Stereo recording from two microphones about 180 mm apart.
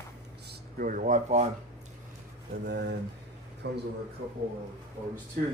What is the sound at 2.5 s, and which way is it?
Speech, 70° right (ahead or behind).